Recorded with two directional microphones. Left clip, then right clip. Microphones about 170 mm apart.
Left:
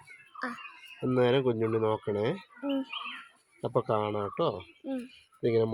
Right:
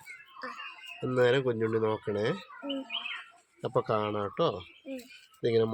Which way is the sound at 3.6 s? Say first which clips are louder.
Even; 35° left (ahead or behind).